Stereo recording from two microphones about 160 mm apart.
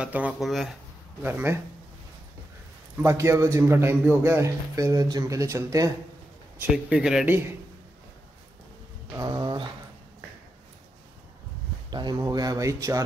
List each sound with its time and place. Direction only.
0.0 s speech: 5° right (ahead or behind)
1.2 s speech: 15° right (ahead or behind)
3.0 s a man's voice: 15° right (ahead or behind)
6.6 s speech: 5° right (ahead or behind)
9.1 s a man's voice: 25° right (ahead or behind)
11.9 s a man's voice: 25° right (ahead or behind)